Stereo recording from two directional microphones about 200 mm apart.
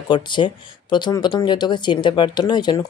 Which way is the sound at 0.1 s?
25° left (ahead or behind).